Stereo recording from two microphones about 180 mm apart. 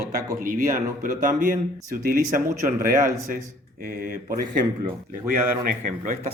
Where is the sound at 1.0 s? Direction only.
45° right (ahead or behind).